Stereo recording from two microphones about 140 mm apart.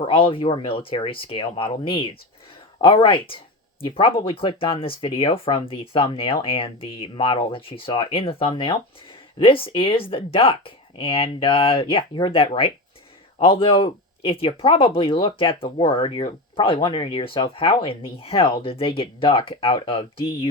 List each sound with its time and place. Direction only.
0.0 s speech: 40° left (ahead or behind)